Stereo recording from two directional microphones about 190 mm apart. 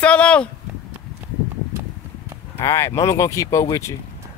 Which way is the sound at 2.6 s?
15° left (ahead or behind).